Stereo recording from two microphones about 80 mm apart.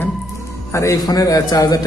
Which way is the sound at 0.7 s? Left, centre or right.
Left.